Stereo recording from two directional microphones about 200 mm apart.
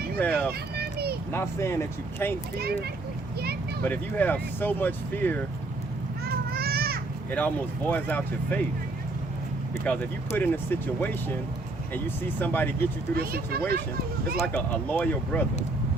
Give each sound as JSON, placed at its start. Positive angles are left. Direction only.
{"t": 0.2, "sound": "speech", "side_deg": 10}
{"t": 0.8, "sound": "vehicle", "side_deg": -55}
{"t": 1.3, "sound": "speech", "side_deg": 15}
{"t": 2.6, "sound": "speech", "side_deg": -50}
{"t": 3.8, "sound": "speech", "side_deg": 10}
{"t": 6.2, "sound": "children playing", "side_deg": -50}
{"t": 7.3, "sound": "speech", "side_deg": 10}
{"t": 9.8, "sound": "speech", "side_deg": 5}
{"t": 13.1, "sound": "speech", "side_deg": -50}
{"t": 14.4, "sound": "speech", "side_deg": 5}